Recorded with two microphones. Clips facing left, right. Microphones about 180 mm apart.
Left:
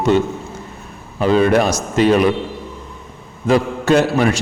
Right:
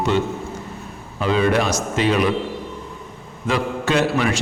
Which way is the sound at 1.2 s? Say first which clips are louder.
Left 5 dB; 45° left (ahead or behind).